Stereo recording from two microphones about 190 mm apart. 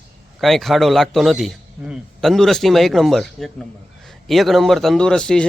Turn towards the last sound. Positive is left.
turn(degrees=5)  # may be behind; listen again after turning